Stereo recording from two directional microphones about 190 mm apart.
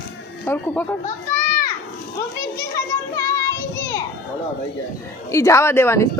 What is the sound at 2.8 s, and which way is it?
Music, 15° left (ahead or behind).